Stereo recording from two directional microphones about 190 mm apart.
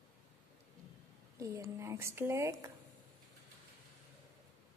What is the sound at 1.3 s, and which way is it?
Speech, 15° right (ahead or behind).